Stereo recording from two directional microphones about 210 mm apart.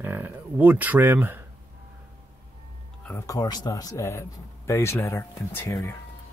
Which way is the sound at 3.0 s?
15° left (ahead or behind).